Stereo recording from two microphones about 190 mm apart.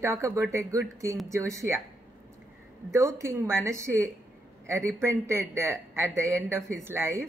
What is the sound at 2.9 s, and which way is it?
A woman's voice, 15° right (ahead or behind).